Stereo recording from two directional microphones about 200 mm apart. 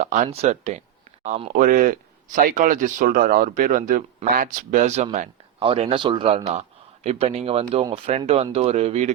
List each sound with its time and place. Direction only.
0.0 s speech: 35° right (ahead or behind)